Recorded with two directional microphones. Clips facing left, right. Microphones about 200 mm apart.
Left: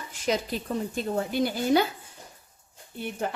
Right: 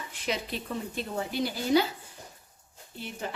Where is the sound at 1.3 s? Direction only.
50° left (ahead or behind).